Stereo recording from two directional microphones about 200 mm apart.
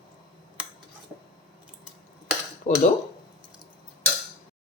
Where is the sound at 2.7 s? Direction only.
35° left (ahead or behind).